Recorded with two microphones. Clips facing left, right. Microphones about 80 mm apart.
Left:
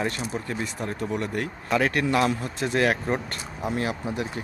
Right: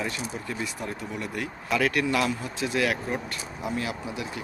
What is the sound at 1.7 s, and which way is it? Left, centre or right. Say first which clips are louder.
Speech: left 1 dB; left.